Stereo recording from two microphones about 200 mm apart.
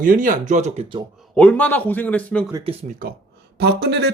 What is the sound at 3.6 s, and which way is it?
Speech, 55° right (ahead or behind).